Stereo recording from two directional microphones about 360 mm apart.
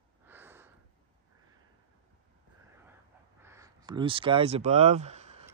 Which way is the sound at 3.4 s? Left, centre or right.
Centre.